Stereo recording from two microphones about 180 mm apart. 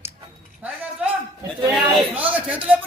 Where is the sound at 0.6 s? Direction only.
10° right (ahead or behind).